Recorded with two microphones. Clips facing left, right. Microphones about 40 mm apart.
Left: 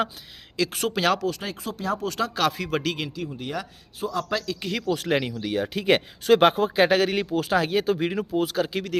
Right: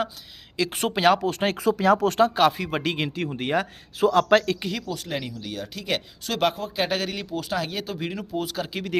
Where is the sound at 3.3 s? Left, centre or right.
Right.